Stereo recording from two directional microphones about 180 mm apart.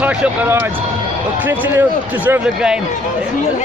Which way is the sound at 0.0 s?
10° right (ahead or behind).